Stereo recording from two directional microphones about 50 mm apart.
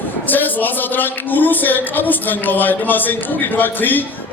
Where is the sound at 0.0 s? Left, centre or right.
Left.